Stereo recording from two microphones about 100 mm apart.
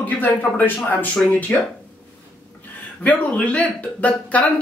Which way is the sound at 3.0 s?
15° left (ahead or behind).